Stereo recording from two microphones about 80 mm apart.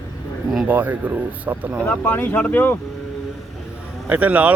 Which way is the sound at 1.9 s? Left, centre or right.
Left.